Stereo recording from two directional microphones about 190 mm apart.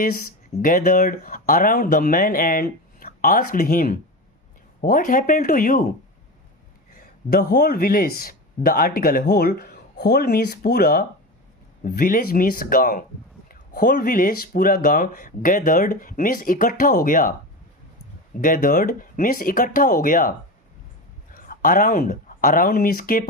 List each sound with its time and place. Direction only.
0.6 s speech: 45° left (ahead or behind)
6.9 s speech: 50° left (ahead or behind)
18.3 s speech: 50° left (ahead or behind)
21.3 s speech: 45° left (ahead or behind)